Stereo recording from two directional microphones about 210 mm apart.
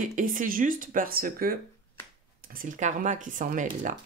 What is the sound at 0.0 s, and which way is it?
Speech, 40° right (ahead or behind).